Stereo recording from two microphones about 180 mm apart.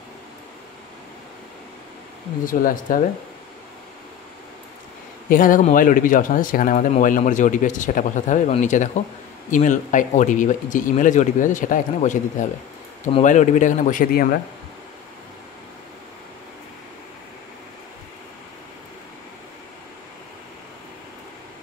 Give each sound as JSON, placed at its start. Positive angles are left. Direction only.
{"t": 2.4, "sound": "speech", "side_deg": 50}
{"t": 5.3, "sound": "speech", "side_deg": 50}